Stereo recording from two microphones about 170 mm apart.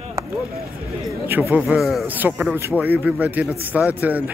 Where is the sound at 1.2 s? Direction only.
10° right (ahead or behind).